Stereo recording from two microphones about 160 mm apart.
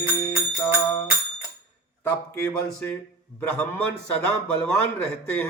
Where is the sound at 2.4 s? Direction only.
15° left (ahead or behind).